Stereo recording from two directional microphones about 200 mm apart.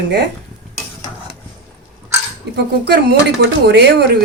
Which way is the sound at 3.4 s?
55° right (ahead or behind).